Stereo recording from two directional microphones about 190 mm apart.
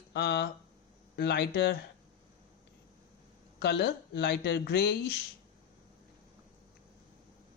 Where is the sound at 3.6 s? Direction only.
60° left (ahead or behind).